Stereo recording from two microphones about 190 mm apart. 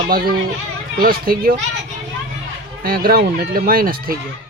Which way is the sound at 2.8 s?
50° right (ahead or behind).